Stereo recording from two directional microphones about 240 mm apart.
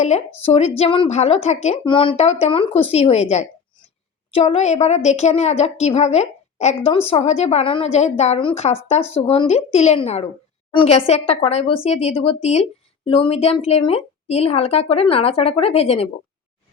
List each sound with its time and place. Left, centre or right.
0.0 s a woman's voice: left